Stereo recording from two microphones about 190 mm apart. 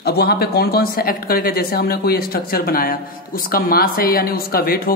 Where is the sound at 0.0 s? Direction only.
60° left (ahead or behind).